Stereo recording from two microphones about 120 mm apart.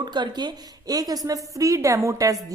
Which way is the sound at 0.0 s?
35° right (ahead or behind).